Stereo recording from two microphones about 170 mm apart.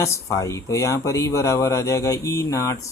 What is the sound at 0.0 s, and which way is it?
Speech, 15° left (ahead or behind).